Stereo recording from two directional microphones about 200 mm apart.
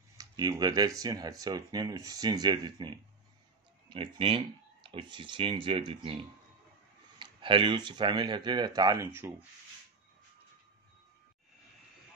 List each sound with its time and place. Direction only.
0.2 s speech: 20° right (ahead or behind)
7.2 s speech: 25° right (ahead or behind)